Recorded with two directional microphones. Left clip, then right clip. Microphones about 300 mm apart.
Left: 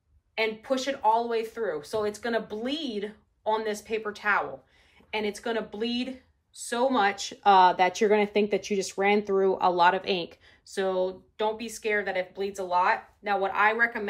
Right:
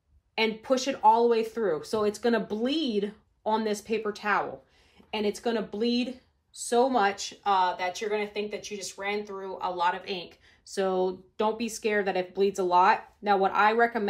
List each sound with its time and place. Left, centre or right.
0.3 s speech: centre
5.5 s speech: centre